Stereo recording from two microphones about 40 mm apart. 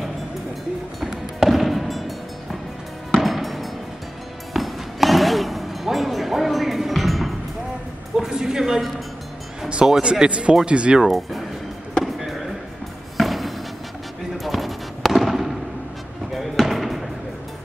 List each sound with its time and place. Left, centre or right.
1.0 s music: centre
3.2 s music: centre
8.2 s a sound: centre
9.8 s speech: centre
11.1 s speech: centre
12.0 s a sound: centre
13.2 s music: centre
14.4 s fireworks: centre
16.7 s basketball bounce: centre